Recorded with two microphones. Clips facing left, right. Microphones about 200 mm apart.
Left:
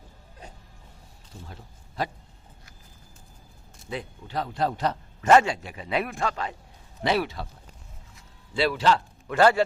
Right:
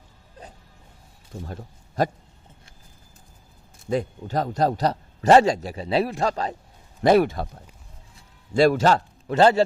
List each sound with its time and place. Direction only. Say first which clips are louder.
2.0 s speech: right 7 dB; 45° right (ahead or behind)
3.8 s speech: right 10 dB; 45° right (ahead or behind)
7.0 s speech: right 8 dB; 50° right (ahead or behind)
8.5 s speech: right 6 dB; 45° right (ahead or behind)
9.2 s a man's voice: right 3 dB; 25° right (ahead or behind)